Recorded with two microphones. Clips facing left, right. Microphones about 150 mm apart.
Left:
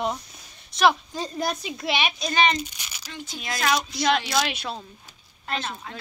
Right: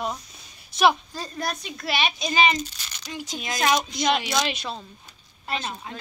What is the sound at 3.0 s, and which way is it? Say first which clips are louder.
A woman's voice: right 2 dB; 15° right (ahead or behind).